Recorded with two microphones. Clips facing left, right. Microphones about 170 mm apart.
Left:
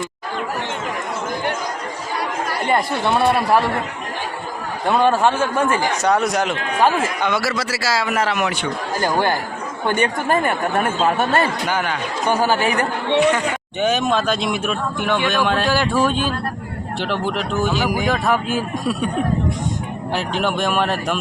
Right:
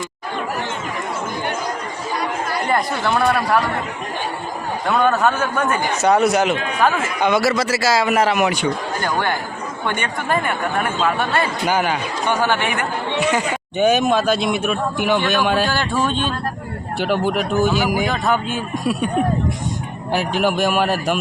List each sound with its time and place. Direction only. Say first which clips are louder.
2.6 s speech: left 2 dB; 25° left (ahead or behind)
4.9 s speech: left 1 dB; 30° left (ahead or behind)
6.0 s speech: right 6 dB; 5° right (ahead or behind)
7.2 s a man's voice: right 4 dB; 15° right (ahead or behind)
9.8 s speech: left 5 dB; 35° left (ahead or behind)
11.7 s a man's voice: right 3 dB; 10° right (ahead or behind)
12.5 s speech: left 2 dB; 35° left (ahead or behind)
13.3 s speech: right 1 dB; 10° right (ahead or behind); by 16.3 s 5° left (ahead or behind)
17.0 s speech: right 4 dB; 5° right (ahead or behind)
20.1 s speech: right 3 dB; 5° right (ahead or behind)